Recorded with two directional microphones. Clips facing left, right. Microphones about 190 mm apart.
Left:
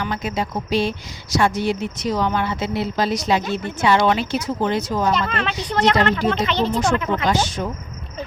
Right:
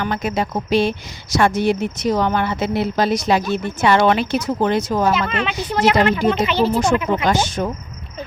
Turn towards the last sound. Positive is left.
turn(degrees=-50)  # may be behind; listen again after turning